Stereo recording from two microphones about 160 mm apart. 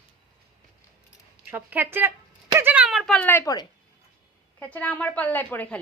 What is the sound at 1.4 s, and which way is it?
Speech, 10° right (ahead or behind).